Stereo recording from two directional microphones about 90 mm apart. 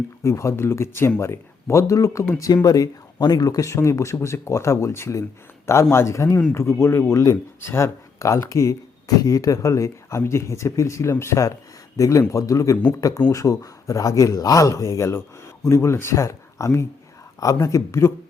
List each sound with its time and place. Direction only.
0.2 s speech: 30° left (ahead or behind)